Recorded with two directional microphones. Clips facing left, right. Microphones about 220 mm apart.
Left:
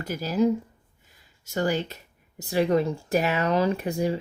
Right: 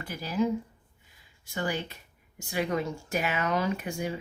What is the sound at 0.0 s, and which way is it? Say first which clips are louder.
Speech: left 4 dB; 40° left (ahead or behind).